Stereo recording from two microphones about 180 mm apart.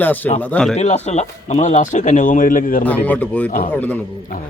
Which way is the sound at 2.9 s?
10° left (ahead or behind).